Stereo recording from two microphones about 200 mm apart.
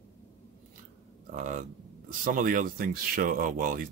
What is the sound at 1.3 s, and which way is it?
Speech, 40° right (ahead or behind).